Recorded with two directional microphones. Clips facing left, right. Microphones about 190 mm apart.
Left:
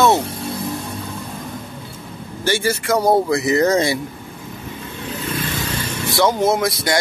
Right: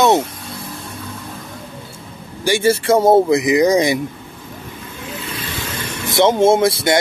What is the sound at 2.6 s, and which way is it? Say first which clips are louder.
Speech: right 6 dB; 30° right (ahead or behind).